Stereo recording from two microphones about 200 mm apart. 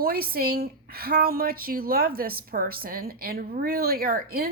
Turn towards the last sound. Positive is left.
turn(degrees=-50)  # may be behind; listen again after turning